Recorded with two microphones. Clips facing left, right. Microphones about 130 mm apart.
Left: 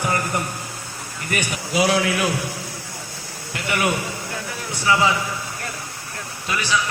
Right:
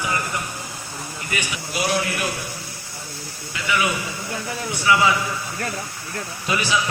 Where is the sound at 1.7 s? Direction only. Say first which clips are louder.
Left 4 dB; 90° left.